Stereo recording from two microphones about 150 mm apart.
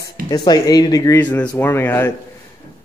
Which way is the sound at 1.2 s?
10° left (ahead or behind).